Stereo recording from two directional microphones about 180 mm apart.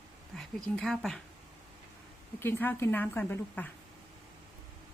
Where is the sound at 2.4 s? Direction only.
10° left (ahead or behind).